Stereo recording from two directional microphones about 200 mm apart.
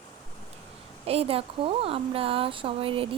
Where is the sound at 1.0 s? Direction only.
30° right (ahead or behind).